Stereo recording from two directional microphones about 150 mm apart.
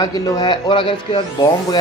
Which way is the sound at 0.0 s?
25° left (ahead or behind).